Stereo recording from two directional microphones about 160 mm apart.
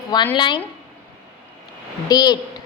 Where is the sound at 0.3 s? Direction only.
30° left (ahead or behind).